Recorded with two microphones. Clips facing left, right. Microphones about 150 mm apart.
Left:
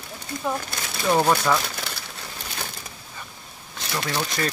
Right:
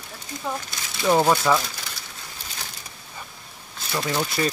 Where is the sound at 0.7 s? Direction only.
55° left (ahead or behind).